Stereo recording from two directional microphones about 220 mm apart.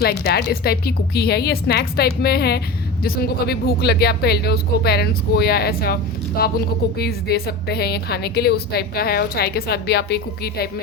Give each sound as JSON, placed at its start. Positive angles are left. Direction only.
{"t": 0.0, "sound": "a woman's voice", "side_deg": 45}